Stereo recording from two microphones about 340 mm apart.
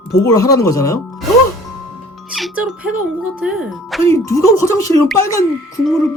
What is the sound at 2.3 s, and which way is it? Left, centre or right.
Speech, centre.